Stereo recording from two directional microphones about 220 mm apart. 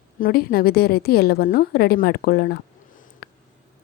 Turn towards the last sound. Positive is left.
turn(degrees=45)  # may be behind; listen again after turning